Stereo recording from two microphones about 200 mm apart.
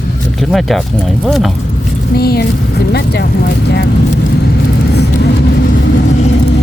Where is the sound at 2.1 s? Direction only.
50° left (ahead or behind).